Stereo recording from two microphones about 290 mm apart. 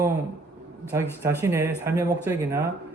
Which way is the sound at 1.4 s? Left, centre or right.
Centre.